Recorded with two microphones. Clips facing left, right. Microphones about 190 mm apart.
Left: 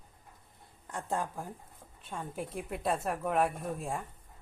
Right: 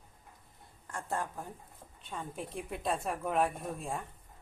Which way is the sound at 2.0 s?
5° left (ahead or behind).